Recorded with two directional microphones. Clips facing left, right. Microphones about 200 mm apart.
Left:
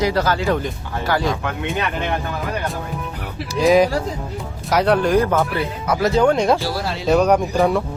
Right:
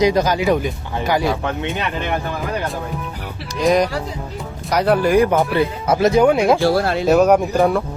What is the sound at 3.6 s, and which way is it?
Speech, centre (ahead or behind).